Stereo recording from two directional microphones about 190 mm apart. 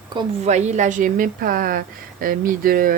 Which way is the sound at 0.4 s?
35° right (ahead or behind).